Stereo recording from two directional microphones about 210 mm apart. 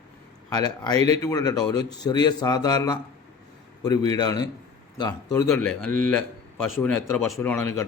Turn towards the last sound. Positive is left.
turn(degrees=10)  # may be behind; listen again after turning